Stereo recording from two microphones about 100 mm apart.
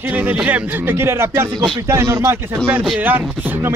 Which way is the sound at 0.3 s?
15° right (ahead or behind).